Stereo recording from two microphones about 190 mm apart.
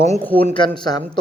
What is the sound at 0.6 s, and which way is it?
Speech, 25° left (ahead or behind).